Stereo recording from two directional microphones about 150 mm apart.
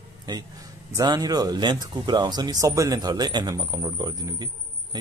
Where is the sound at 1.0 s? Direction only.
25° right (ahead or behind).